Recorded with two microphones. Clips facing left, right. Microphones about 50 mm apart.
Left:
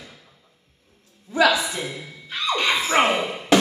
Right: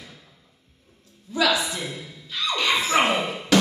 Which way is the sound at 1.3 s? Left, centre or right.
Left.